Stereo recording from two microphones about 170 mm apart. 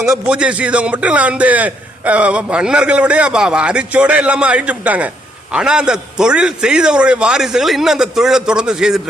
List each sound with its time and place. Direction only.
0.0 s a man's voice: 5° right (ahead or behind)